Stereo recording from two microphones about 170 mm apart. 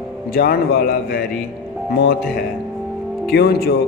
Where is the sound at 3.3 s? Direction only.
70° left (ahead or behind).